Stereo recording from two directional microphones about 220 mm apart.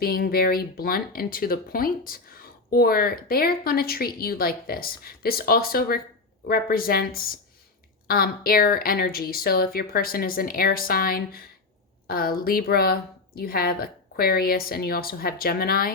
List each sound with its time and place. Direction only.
0.0 s speech: 45° left (ahead or behind)